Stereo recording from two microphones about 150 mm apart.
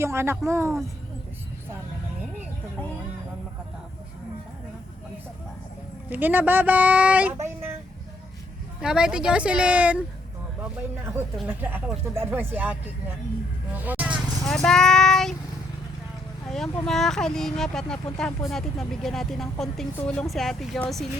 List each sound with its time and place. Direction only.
0.0 s speech: 15° right (ahead or behind)
6.1 s speech: 10° right (ahead or behind)
8.8 s speech: 5° right (ahead or behind)
11.4 s speech: 10° right (ahead or behind)
13.7 s vehicle: 10° right (ahead or behind)
14.4 s speech: 5° left (ahead or behind)
16.5 s speech: centre (ahead or behind)